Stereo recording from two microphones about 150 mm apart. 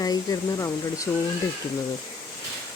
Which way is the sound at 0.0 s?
25° left (ahead or behind).